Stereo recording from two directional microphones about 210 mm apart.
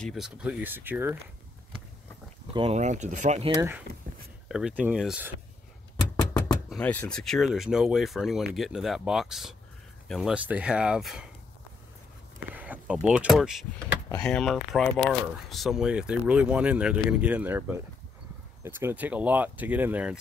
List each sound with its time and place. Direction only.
0.0 s speech: centre (ahead or behind)
2.5 s speech: 30° right (ahead or behind)
4.5 s speech: 5° right (ahead or behind)
12.5 s speech: 5° right (ahead or behind)